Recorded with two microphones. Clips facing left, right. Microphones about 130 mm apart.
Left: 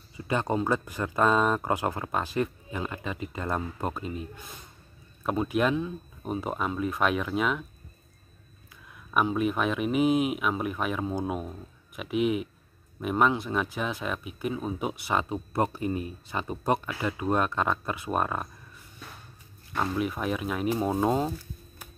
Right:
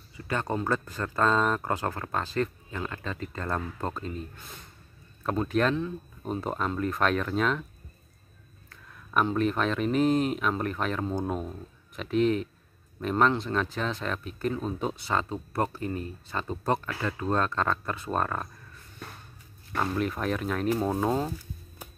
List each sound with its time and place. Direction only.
0.2 s speech: 20° left (ahead or behind)
8.6 s speech: 10° left (ahead or behind)
19.7 s speech: 5° left (ahead or behind)
20.6 s speech: 20° left (ahead or behind)